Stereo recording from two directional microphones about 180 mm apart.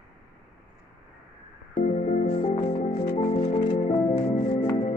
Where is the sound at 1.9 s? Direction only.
40° left (ahead or behind).